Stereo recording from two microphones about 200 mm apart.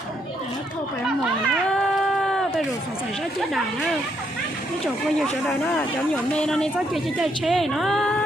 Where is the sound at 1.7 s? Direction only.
5° left (ahead or behind).